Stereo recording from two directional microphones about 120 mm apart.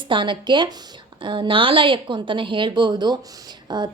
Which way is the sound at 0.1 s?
40° right (ahead or behind).